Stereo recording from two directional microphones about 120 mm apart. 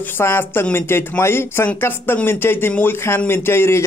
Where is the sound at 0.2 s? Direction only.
20° left (ahead or behind).